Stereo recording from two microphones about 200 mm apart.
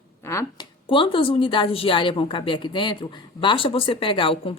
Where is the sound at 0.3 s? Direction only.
15° left (ahead or behind).